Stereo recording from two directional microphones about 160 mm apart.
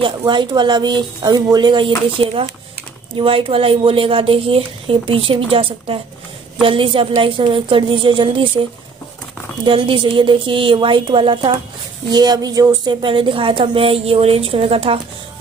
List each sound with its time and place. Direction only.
0.0 s speech: 30° right (ahead or behind)
9.7 s speech: 30° right (ahead or behind)